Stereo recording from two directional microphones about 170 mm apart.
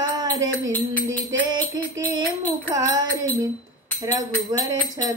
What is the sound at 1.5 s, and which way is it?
Music, 20° right (ahead or behind).